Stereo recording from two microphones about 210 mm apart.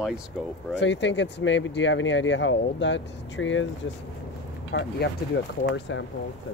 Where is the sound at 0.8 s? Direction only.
60° left (ahead or behind).